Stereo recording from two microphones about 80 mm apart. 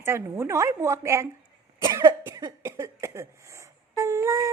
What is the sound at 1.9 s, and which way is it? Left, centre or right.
Cough, right.